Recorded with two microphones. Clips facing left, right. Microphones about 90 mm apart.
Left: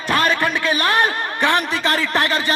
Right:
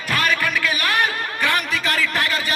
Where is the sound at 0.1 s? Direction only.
30° left (ahead or behind).